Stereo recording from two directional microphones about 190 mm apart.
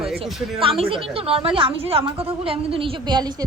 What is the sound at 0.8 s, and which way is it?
A woman's voice, 30° right (ahead or behind).